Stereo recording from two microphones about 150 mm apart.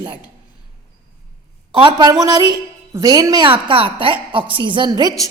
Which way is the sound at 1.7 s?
30° right (ahead or behind).